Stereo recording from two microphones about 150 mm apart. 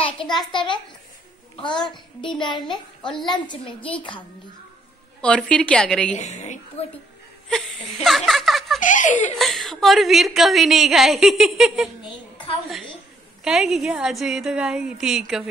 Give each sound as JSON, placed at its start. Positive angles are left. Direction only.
{"t": 0.5, "sound": "a woman's voice", "side_deg": 30}
{"t": 2.6, "sound": "a woman's voice", "side_deg": 5}
{"t": 3.3, "sound": "a woman's voice", "side_deg": 30}
{"t": 5.2, "sound": "a woman's voice", "side_deg": 5}
{"t": 6.1, "sound": "a woman's voice", "side_deg": 50}
{"t": 7.4, "sound": "a sound", "side_deg": 5}
{"t": 8.8, "sound": "speech", "side_deg": 60}
{"t": 9.4, "sound": "a woman's voice", "side_deg": 0}
{"t": 13.4, "sound": "a woman's voice", "side_deg": -5}